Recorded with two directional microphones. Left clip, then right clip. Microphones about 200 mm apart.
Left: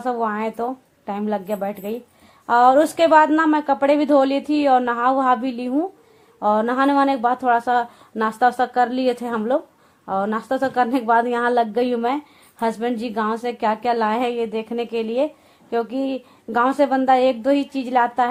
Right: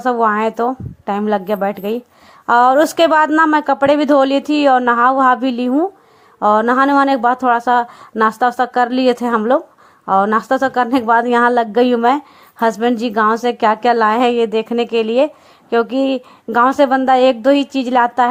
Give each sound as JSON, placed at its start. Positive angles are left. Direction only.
{"t": 0.0, "sound": "speech", "side_deg": -30}